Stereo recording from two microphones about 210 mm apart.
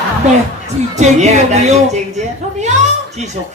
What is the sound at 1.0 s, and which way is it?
A woman's voice, 30° right (ahead or behind).